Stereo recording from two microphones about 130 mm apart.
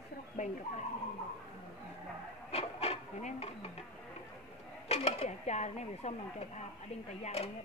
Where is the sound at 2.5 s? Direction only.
50° left (ahead or behind).